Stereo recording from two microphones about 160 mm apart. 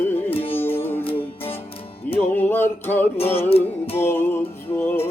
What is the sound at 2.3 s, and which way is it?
Music, 10° left (ahead or behind).